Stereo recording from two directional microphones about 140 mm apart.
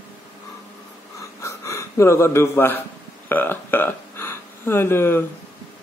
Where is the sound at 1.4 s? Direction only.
20° left (ahead or behind).